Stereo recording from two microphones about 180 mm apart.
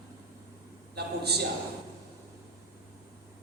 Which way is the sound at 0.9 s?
65° right (ahead or behind).